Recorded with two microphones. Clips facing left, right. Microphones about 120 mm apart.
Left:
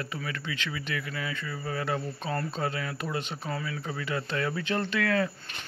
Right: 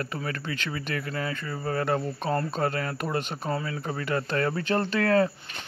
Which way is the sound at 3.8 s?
50° right (ahead or behind).